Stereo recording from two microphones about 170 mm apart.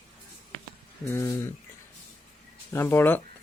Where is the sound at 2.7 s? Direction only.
10° left (ahead or behind).